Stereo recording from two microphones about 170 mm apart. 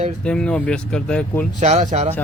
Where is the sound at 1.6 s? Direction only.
40° right (ahead or behind).